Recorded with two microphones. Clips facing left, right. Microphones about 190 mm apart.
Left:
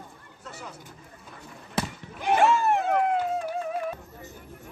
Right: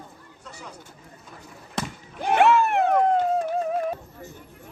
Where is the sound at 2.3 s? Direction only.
65° right (ahead or behind).